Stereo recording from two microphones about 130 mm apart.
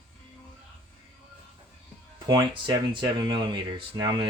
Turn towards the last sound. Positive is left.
turn(degrees=-35)  # may be behind; listen again after turning